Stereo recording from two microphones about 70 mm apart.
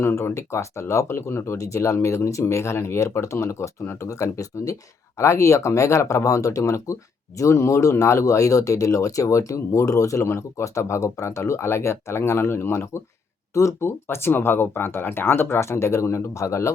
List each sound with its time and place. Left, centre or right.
0.0 s speech: left
1.5 s speech: left